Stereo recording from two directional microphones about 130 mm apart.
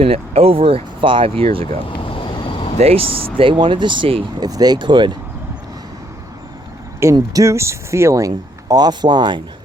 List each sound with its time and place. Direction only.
0.0 s speech: 50° right (ahead or behind)
2.0 s vehicle: 40° left (ahead or behind)
2.7 s speech: 50° right (ahead or behind)
7.0 s speech: 25° right (ahead or behind)